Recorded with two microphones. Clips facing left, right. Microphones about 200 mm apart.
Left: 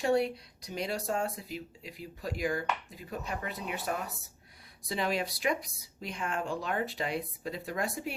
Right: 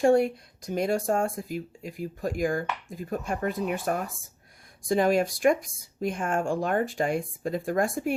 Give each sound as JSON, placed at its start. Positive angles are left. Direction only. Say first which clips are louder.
{"t": 0.0, "sound": "speech", "louder": "right 7 dB", "side_deg": -50}